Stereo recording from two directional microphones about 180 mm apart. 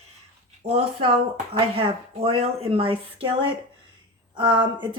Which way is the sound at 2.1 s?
35° right (ahead or behind).